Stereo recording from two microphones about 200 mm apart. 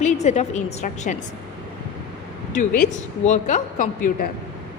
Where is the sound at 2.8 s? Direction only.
40° left (ahead or behind).